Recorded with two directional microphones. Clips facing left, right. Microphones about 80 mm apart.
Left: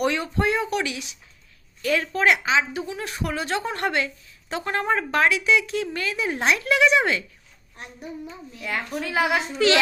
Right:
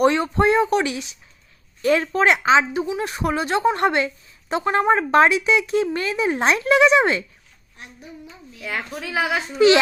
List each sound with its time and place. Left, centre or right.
0.0 s speech: right
8.6 s a woman's voice: centre
9.6 s speech: centre